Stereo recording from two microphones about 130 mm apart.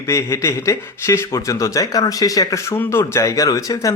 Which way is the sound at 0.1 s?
25° left (ahead or behind).